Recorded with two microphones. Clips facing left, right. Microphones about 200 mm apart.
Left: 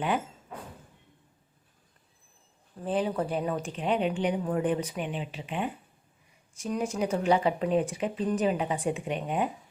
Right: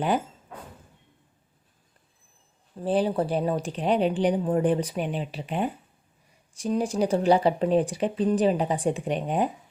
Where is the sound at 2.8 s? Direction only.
35° right (ahead or behind).